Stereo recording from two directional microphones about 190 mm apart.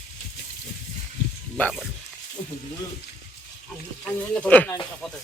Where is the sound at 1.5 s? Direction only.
5° left (ahead or behind).